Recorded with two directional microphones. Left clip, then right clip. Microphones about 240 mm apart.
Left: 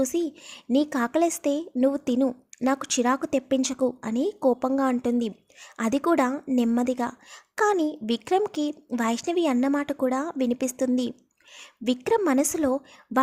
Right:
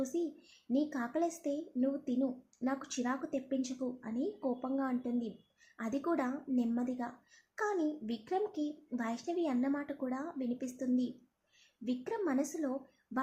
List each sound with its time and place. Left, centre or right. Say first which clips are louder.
0.0 s a child's voice: left 11 dB; left